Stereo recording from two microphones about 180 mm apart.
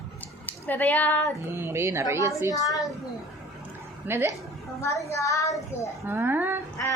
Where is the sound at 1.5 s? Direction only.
15° right (ahead or behind).